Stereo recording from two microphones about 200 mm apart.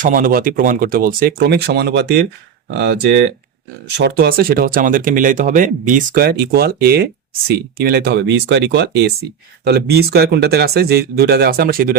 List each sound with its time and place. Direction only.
0.0 s speech: 45° right (ahead or behind)